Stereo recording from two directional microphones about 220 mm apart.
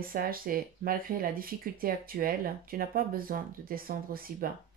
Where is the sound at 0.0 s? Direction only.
40° right (ahead or behind).